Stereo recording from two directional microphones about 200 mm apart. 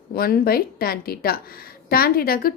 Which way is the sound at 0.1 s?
50° left (ahead or behind).